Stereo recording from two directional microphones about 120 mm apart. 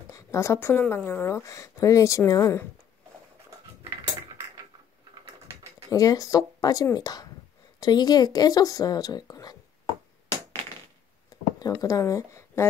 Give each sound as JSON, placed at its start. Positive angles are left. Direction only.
{"t": 0.1, "sound": "speech", "side_deg": 25}
{"t": 5.9, "sound": "speech", "side_deg": 30}
{"t": 11.2, "sound": "a sound", "side_deg": 30}